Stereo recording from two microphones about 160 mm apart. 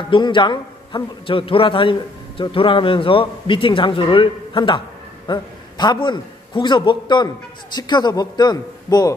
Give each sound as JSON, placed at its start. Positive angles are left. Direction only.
{"t": 0.1, "sound": "a man's voice", "side_deg": 30}